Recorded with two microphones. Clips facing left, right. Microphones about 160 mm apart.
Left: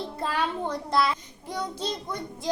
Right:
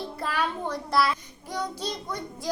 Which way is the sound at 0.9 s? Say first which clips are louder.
Right 1 dB; 20° left (ahead or behind).